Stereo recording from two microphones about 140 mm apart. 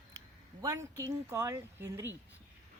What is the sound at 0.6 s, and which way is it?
Speech, 20° right (ahead or behind).